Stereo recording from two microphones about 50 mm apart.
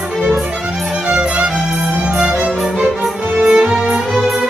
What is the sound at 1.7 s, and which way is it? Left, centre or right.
Music, centre.